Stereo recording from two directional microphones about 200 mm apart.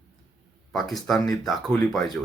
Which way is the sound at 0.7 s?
Centre (ahead or behind).